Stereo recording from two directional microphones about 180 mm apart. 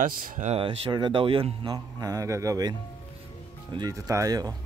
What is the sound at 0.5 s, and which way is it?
Speech, 30° right (ahead or behind).